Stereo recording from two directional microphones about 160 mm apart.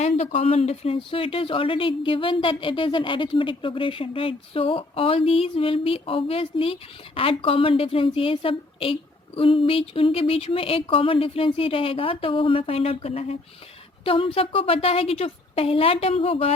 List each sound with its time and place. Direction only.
0.3 s speech: 35° left (ahead or behind)